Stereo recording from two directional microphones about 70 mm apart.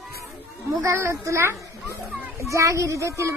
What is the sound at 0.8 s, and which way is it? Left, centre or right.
Speech, right.